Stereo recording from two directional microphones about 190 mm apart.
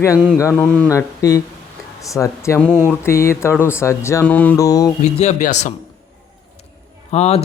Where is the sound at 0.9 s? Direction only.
15° left (ahead or behind).